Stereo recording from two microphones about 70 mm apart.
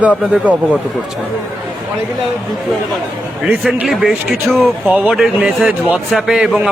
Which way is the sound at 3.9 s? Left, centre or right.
Centre.